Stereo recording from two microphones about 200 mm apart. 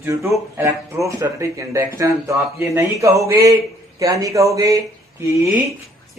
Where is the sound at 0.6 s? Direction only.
15° right (ahead or behind).